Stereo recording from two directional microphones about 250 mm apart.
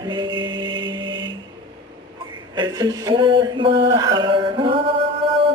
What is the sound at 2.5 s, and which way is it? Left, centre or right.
Female singing, centre.